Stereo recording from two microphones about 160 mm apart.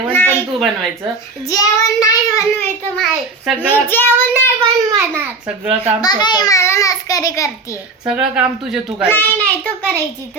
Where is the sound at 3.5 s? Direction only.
10° left (ahead or behind).